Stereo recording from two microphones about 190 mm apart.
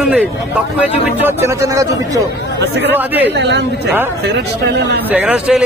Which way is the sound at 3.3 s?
65° right (ahead or behind).